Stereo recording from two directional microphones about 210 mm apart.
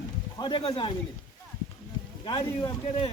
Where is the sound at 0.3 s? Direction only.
20° left (ahead or behind).